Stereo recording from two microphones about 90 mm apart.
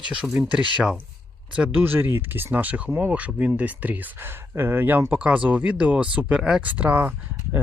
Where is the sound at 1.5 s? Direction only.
20° right (ahead or behind).